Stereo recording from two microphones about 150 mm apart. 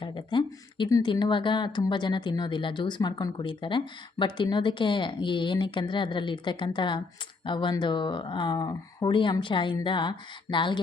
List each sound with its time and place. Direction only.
0.0 s speech: 35° left (ahead or behind)